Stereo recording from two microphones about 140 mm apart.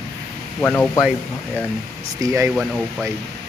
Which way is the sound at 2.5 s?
Centre (ahead or behind).